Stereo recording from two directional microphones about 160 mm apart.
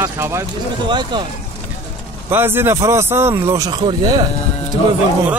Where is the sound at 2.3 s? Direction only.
15° right (ahead or behind).